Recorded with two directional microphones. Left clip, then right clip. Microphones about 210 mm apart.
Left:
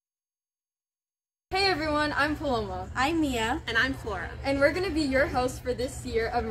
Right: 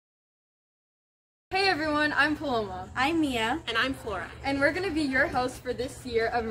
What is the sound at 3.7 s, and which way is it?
Speech, 15° right (ahead or behind).